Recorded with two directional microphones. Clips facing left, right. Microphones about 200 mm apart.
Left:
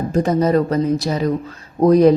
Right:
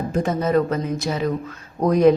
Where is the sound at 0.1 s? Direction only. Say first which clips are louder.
Left 4 dB; 40° left (ahead or behind).